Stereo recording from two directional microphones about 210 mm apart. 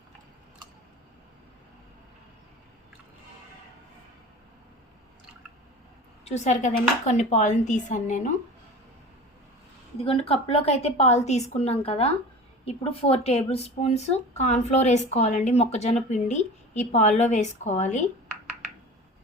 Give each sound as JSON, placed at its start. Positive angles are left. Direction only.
{"t": 6.2, "sound": "a woman's voice", "side_deg": 35}
{"t": 10.0, "sound": "a woman's voice", "side_deg": 25}